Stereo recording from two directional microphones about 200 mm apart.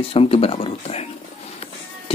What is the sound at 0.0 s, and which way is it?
Speech, 30° left (ahead or behind).